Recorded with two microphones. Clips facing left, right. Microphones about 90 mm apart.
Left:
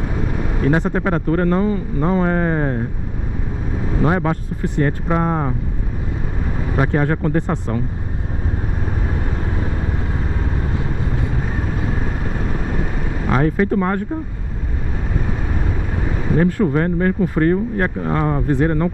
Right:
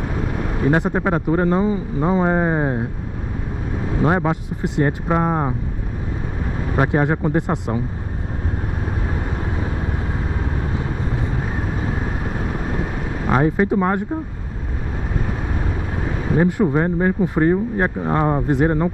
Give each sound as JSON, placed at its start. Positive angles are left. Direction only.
{"t": 0.6, "sound": "speech", "side_deg": -15}
{"t": 4.1, "sound": "speech", "side_deg": -15}
{"t": 6.7, "sound": "speech", "side_deg": -20}
{"t": 13.3, "sound": "speech", "side_deg": -20}
{"t": 16.3, "sound": "speech", "side_deg": -15}